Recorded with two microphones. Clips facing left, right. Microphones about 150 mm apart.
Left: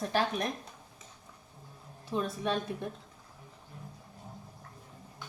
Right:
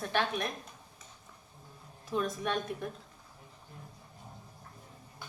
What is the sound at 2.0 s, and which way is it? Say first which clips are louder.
Speech: left 1 dB; 30° left (ahead or behind).